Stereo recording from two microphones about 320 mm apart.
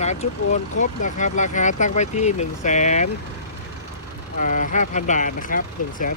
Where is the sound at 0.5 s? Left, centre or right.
Left.